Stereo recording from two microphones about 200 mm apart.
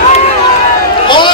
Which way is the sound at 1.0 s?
25° left (ahead or behind).